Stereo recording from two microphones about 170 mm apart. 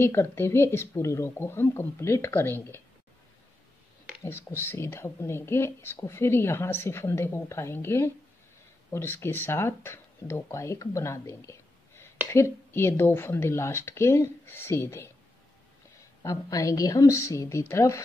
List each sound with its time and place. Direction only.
0.0 s speech: 15° left (ahead or behind)
4.2 s speech: 15° left (ahead or behind)
16.2 s speech: 20° left (ahead or behind)